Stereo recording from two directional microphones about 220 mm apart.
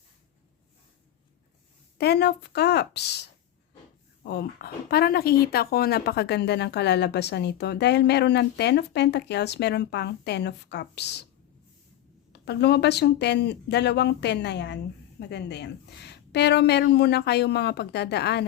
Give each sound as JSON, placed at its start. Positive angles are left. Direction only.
{"t": 2.0, "sound": "speech", "side_deg": 50}
{"t": 12.3, "sound": "speech", "side_deg": 50}